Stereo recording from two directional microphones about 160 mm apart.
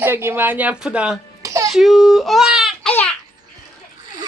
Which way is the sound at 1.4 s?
20° right (ahead or behind).